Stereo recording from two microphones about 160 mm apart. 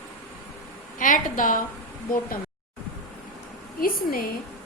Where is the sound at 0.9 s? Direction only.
55° left (ahead or behind).